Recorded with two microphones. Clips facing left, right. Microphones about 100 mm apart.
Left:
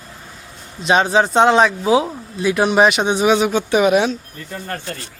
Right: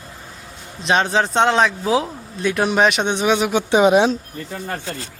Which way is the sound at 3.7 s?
25° right (ahead or behind).